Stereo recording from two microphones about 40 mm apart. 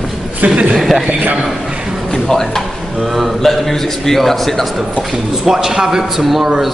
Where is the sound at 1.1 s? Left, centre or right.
Right.